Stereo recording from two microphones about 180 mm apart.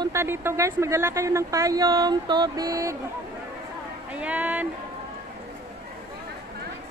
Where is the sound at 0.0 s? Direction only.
15° right (ahead or behind).